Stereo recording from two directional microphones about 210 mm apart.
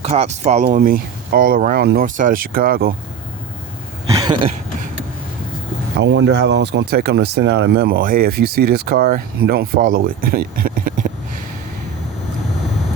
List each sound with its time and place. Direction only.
0.0 s speech: 30° right (ahead or behind)
4.1 s a sound: 20° right (ahead or behind)
6.0 s speech: 60° right (ahead or behind); by 11.1 s 40° right (ahead or behind)